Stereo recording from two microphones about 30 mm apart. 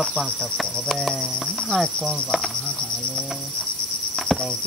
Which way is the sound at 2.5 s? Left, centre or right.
Left.